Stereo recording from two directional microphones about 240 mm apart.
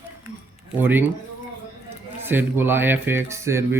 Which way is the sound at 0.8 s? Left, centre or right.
Centre.